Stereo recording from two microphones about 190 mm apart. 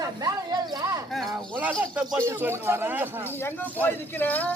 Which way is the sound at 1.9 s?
Centre (ahead or behind).